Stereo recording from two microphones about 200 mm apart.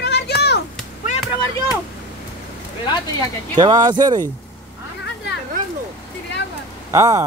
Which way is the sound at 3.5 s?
20° right (ahead or behind).